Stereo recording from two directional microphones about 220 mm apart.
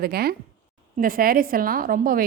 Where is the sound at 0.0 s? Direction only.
45° right (ahead or behind).